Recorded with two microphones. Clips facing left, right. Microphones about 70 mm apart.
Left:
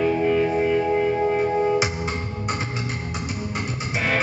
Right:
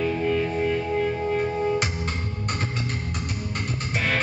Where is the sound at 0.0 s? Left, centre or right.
Centre.